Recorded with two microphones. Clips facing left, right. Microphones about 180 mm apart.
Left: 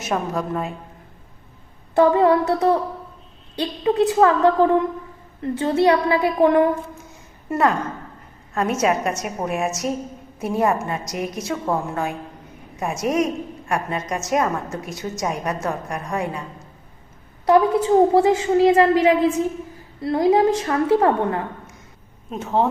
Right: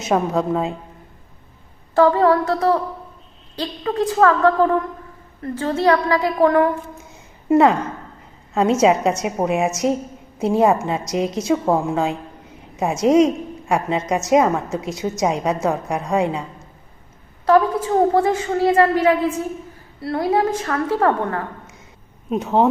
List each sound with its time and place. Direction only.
0.0 s a woman's voice: 20° right (ahead or behind)
2.0 s a woman's voice: 15° left (ahead or behind)
7.5 s a woman's voice: 20° right (ahead or behind)
17.4 s a woman's voice: 20° left (ahead or behind)